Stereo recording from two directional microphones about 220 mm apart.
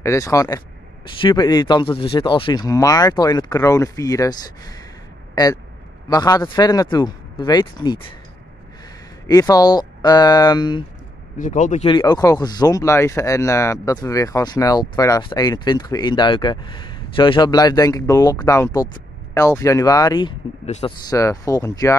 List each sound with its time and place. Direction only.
0.0 s speech: 15° left (ahead or behind)
9.3 s speech: 15° left (ahead or behind)
11.3 s speech: 35° left (ahead or behind)
12.0 s speech: 15° left (ahead or behind)
21.1 s speech: 15° left (ahead or behind)